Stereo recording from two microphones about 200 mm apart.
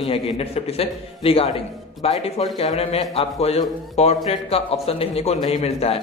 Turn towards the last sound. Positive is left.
turn(degrees=30)  # may be behind; listen again after turning